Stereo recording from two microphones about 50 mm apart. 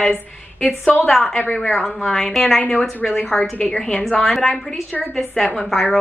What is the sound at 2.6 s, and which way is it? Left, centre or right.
Speech, left.